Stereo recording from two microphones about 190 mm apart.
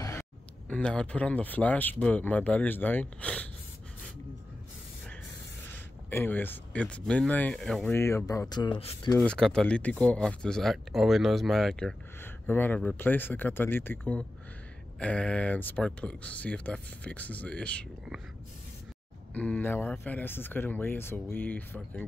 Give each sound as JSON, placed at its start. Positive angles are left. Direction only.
{"t": 0.7, "sound": "speech", "side_deg": 5}
{"t": 6.0, "sound": "speech", "side_deg": 10}
{"t": 9.2, "sound": "speech", "side_deg": 5}
{"t": 19.3, "sound": "speech", "side_deg": 5}